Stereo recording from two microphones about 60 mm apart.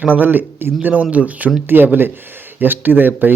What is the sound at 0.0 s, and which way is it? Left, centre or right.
Speech, right.